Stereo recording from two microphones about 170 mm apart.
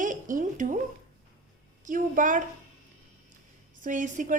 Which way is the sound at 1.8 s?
50° right (ahead or behind).